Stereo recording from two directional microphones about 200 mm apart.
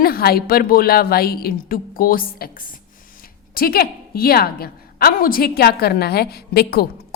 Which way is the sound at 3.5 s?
50° left (ahead or behind).